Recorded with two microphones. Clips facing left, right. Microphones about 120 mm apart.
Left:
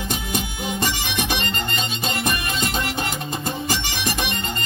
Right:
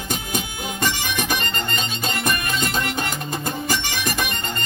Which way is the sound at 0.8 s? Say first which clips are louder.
Right 3 dB; 45° right (ahead or behind).